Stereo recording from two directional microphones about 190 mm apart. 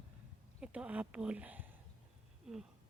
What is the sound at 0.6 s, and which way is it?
Speech, 5° right (ahead or behind).